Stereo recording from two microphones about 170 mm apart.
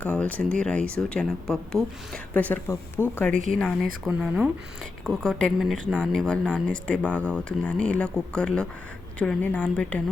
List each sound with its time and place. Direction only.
0.0 s speech: 10° left (ahead or behind)
3.5 s a woman's voice: centre (ahead or behind)